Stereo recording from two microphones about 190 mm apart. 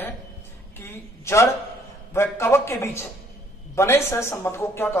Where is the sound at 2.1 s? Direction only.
15° left (ahead or behind).